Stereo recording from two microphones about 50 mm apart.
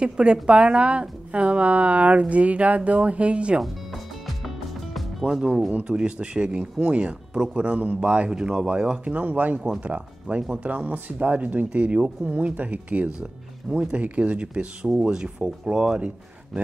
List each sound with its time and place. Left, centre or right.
0.0 s speech: right
5.3 s speech: centre